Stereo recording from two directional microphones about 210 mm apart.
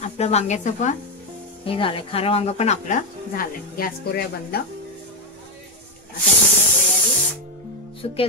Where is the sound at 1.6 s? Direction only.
25° left (ahead or behind); by 4.6 s 45° left (ahead or behind).